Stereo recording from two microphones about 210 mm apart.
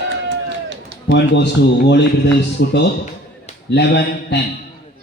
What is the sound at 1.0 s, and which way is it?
Speech, 55° left (ahead or behind).